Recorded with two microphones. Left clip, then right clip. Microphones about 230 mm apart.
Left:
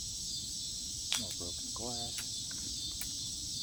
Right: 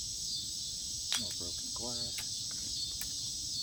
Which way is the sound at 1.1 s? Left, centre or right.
Centre.